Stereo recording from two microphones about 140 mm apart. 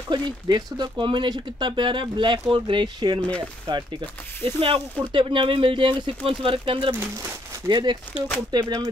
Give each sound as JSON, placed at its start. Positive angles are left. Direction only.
{"t": 0.1, "sound": "speech", "side_deg": -30}
{"t": 3.2, "sound": "speech", "side_deg": 10}
{"t": 3.6, "sound": "speech", "side_deg": -30}